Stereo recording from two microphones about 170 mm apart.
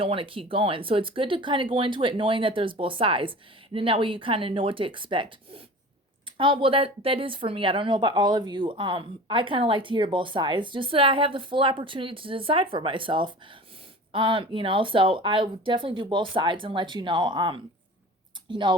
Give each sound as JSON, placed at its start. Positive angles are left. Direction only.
{"t": 0.0, "sound": "speech", "side_deg": -30}